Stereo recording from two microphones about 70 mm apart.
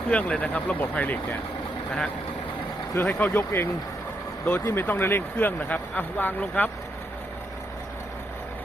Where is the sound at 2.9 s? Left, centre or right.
Left.